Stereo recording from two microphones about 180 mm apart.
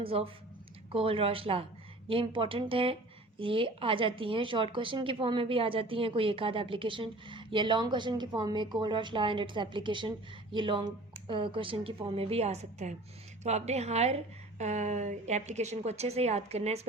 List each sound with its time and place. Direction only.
0.0 s a woman's voice: 30° right (ahead or behind)